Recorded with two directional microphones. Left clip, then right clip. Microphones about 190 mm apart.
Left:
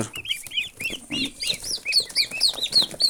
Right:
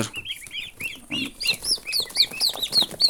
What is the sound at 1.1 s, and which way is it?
Bird flight, centre (ahead or behind).